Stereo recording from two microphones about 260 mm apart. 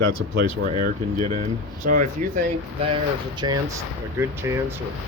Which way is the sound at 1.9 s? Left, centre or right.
Right.